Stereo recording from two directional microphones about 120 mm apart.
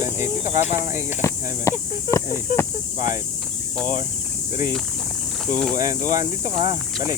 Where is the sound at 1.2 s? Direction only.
25° left (ahead or behind).